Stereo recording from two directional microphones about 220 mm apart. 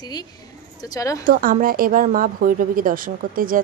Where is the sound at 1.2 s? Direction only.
40° right (ahead or behind).